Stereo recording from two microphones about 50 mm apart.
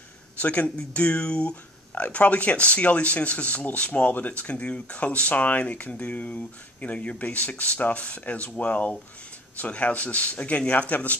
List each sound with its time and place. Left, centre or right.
0.4 s speech: left